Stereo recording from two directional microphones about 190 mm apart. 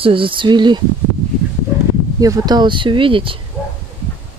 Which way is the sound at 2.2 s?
20° right (ahead or behind).